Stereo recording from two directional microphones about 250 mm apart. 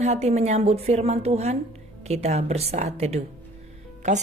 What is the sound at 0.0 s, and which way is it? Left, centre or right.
A woman's voice, right.